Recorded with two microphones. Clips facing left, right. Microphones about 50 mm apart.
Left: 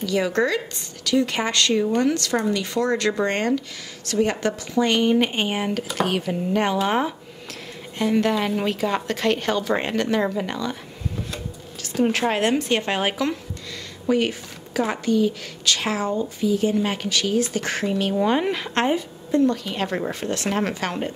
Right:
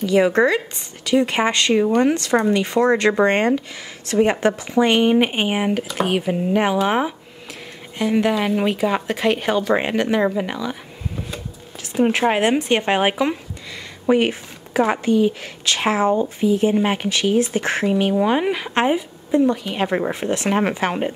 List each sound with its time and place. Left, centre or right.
0.0 s a woman's voice: right; by 10.8 s centre
11.9 s a woman's voice: centre